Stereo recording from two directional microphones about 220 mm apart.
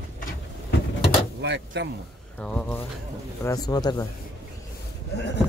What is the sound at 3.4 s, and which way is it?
Speech, 15° left (ahead or behind).